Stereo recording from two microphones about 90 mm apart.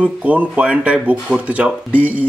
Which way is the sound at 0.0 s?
15° right (ahead or behind).